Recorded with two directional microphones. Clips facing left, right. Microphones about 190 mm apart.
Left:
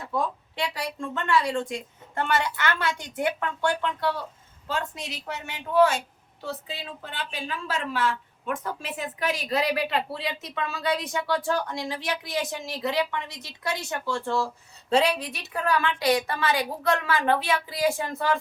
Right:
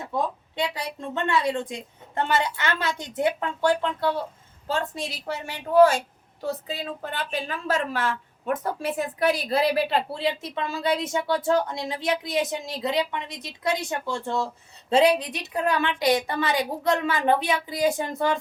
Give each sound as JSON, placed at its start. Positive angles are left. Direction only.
{"t": 0.1, "sound": "a woman's voice", "side_deg": -20}